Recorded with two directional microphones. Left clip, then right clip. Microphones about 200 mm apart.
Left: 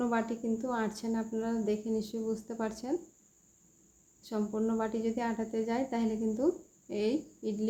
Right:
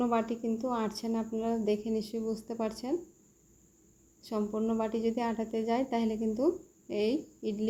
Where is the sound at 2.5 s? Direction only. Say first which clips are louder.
Right 2 dB; 10° right (ahead or behind).